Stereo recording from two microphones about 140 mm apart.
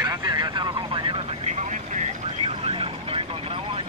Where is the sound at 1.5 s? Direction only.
55° right (ahead or behind).